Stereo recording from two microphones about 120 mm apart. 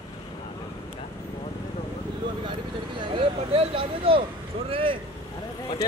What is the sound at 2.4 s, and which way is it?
Speech, 40° right (ahead or behind).